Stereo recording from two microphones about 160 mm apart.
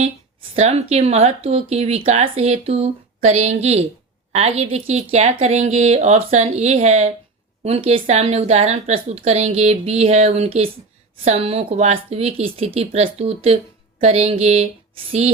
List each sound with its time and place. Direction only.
0.5 s a woman's voice: 40° right (ahead or behind)